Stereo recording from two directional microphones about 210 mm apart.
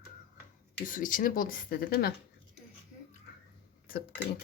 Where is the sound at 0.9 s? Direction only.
40° left (ahead or behind).